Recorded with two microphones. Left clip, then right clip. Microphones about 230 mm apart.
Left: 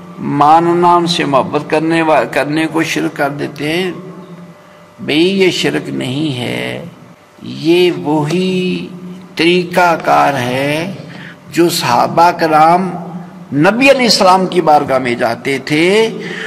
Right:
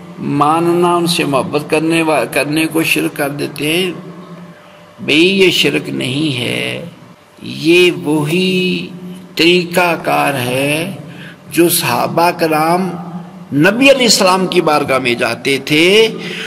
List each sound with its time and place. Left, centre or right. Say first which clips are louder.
0.3 s a man's voice: left 4 dB; right
5.0 s a man's voice: right 1 dB; right